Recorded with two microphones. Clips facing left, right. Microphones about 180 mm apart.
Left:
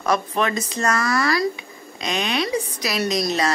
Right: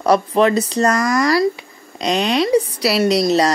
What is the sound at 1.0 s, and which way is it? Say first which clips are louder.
Speech: right 5 dB; 20° right (ahead or behind).